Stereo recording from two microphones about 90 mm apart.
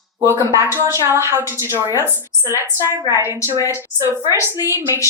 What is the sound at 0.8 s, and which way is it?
A woman's voice, 35° right (ahead or behind).